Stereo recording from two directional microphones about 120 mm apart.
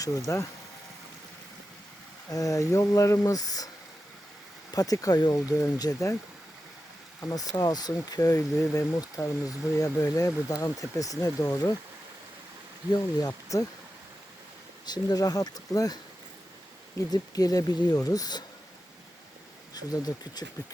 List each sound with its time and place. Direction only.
0.3 s speech: 25° left (ahead or behind)
2.3 s speech: 30° left (ahead or behind)
4.7 s speech: 30° left (ahead or behind)
7.3 s speech: 30° left (ahead or behind)
12.9 s speech: 35° left (ahead or behind)
14.8 s speech: 35° left (ahead or behind)
17.1 s speech: 30° left (ahead or behind)
19.7 s speech: 35° left (ahead or behind)